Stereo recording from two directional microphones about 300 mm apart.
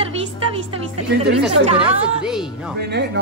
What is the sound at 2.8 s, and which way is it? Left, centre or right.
Speech, right.